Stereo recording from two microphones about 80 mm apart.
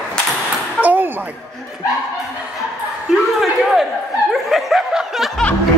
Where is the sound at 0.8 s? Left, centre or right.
Right.